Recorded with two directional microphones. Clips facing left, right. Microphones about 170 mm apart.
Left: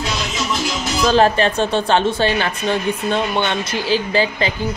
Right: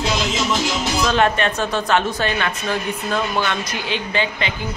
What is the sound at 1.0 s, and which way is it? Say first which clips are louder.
A woman's voice: left 5 dB; 35° left (ahead or behind).